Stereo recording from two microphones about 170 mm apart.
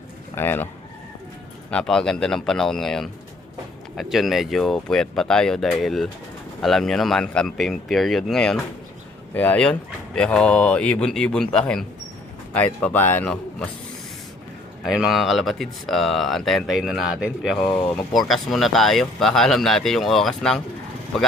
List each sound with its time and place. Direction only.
0.3 s speech: 10° left (ahead or behind)
1.7 s speech: 5° left (ahead or behind)
14.8 s speech: centre (ahead or behind)